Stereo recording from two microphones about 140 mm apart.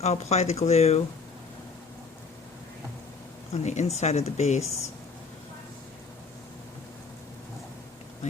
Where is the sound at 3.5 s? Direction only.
55° left (ahead or behind).